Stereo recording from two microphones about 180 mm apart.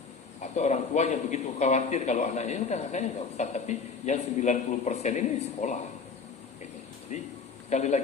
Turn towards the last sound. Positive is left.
turn(degrees=40)  # may be behind; listen again after turning